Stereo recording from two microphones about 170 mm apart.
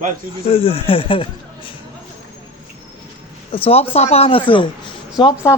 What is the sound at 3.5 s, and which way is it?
Speech, 35° left (ahead or behind).